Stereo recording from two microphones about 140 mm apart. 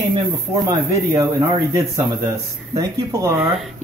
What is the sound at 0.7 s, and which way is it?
Speech, 25° right (ahead or behind).